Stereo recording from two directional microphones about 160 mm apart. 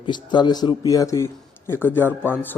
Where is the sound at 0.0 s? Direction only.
30° left (ahead or behind).